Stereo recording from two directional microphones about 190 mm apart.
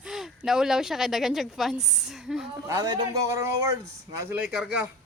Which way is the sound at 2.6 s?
20° right (ahead or behind).